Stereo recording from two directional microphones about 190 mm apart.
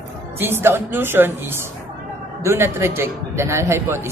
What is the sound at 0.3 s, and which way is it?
Speech, 10° right (ahead or behind).